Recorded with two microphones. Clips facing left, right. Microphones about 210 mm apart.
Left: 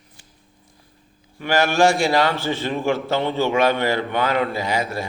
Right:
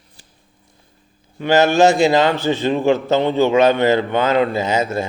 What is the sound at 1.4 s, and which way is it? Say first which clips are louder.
A man's voice: right 5 dB; 20° right (ahead or behind).